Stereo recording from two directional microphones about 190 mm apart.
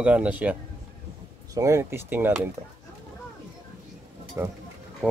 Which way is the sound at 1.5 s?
15° right (ahead or behind).